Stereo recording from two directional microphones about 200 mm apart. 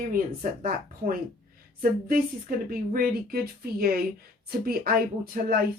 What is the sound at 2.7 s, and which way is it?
A woman's voice, 45° right (ahead or behind).